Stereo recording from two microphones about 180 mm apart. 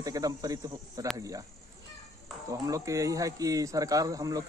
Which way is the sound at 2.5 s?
20° right (ahead or behind).